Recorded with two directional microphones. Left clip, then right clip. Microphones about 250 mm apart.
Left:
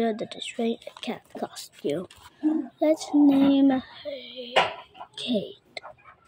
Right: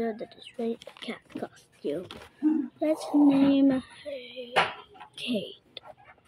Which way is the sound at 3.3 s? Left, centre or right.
Centre.